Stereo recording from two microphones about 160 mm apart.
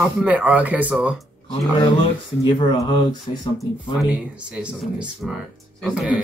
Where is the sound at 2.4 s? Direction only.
30° left (ahead or behind).